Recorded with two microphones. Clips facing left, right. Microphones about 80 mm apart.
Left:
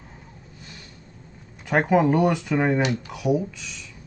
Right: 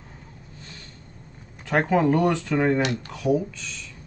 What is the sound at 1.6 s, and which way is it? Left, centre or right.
Speech, centre.